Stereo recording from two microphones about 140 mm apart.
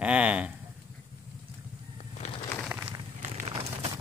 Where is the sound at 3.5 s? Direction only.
45° right (ahead or behind).